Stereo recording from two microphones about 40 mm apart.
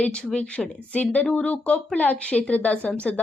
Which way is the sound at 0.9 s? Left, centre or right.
Left.